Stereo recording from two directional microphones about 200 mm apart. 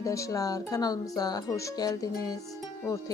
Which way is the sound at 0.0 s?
15° left (ahead or behind).